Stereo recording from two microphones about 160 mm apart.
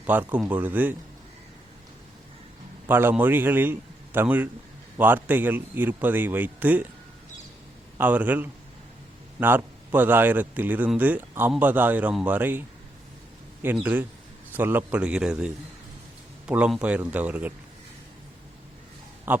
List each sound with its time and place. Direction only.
0.0 s a man's voice: 10° right (ahead or behind)
2.8 s a man's voice: 10° right (ahead or behind)
7.9 s a man's voice: 10° right (ahead or behind)
13.8 s a man's voice: 10° right (ahead or behind)
19.3 s a man's voice: 10° right (ahead or behind)